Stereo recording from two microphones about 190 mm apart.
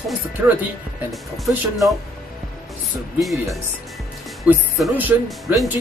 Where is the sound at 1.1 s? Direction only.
Centre (ahead or behind).